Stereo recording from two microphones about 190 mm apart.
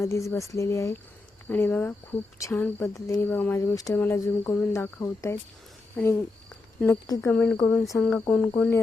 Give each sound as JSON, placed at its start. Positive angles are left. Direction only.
{"t": 0.0, "sound": "speech", "side_deg": 15}
{"t": 6.0, "sound": "a sound", "side_deg": 10}
{"t": 7.1, "sound": "speech", "side_deg": 10}
{"t": 7.7, "sound": "cricket", "side_deg": 5}
{"t": 8.3, "sound": "speech", "side_deg": 10}